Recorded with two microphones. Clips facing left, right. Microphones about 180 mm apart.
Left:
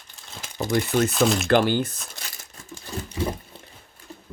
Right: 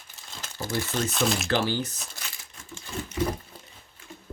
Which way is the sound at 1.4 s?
55° left (ahead or behind).